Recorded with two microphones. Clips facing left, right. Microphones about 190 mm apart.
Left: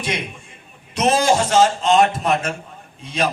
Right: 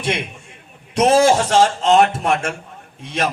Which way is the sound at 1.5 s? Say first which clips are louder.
Right 1 dB; 55° right (ahead or behind).